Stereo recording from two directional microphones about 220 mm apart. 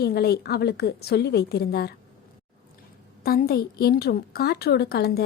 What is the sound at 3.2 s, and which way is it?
A woman's voice, 40° left (ahead or behind).